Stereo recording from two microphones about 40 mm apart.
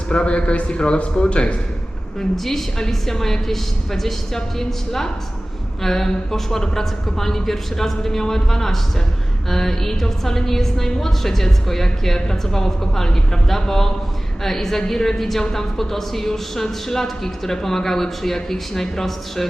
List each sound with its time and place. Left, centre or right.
0.1 s a man's voice: left
2.3 s a woman's voice: centre